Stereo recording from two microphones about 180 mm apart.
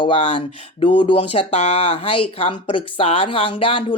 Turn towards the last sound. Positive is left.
turn(degrees=30)  # may be behind; listen again after turning